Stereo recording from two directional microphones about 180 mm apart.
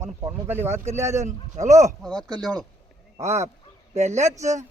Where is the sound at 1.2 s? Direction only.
40° right (ahead or behind).